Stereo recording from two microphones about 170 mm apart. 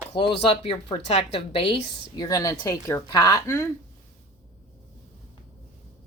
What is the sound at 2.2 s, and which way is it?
Speech, 20° left (ahead or behind).